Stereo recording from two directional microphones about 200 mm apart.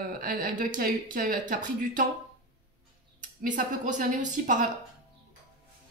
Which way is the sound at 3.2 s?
40° right (ahead or behind).